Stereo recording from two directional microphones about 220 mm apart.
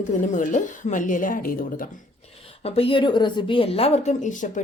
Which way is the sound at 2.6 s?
25° left (ahead or behind).